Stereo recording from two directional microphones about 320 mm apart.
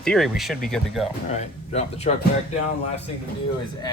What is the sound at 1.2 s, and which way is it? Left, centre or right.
Speech, left.